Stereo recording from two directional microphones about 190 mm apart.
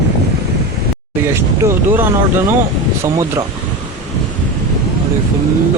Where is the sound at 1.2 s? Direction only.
15° right (ahead or behind).